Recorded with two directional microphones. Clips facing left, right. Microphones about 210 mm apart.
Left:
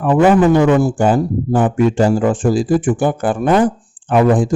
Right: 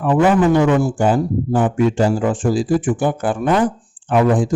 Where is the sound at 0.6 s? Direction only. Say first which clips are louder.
Left 3 dB; 40° left (ahead or behind).